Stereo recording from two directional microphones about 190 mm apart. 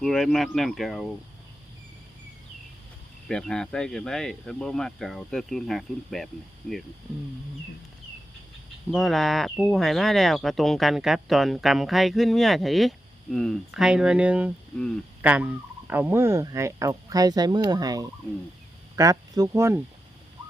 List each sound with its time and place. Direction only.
0.0 s speech: centre (ahead or behind)
3.2 s speech: 5° left (ahead or behind)
8.9 s speech: centre (ahead or behind)
15.2 s fowl: 5° right (ahead or behind)